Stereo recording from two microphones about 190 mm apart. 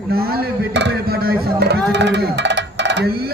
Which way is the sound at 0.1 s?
55° right (ahead or behind).